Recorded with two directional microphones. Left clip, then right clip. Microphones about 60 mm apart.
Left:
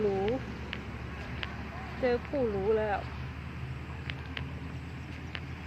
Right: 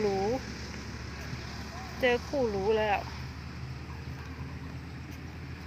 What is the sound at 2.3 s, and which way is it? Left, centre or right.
Speech, right.